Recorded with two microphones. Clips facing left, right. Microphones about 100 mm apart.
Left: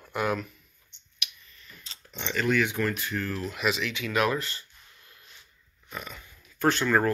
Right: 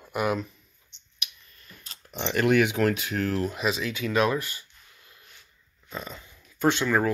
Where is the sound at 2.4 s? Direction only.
70° right (ahead or behind); by 3.4 s 85° right.